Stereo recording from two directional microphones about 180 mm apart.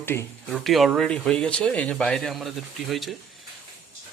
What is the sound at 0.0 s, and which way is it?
Speech, 10° left (ahead or behind).